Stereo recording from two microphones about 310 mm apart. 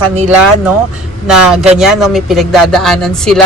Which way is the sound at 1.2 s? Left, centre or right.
Centre.